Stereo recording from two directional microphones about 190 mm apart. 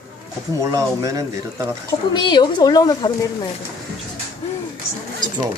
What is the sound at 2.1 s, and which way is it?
Speech, 25° left (ahead or behind).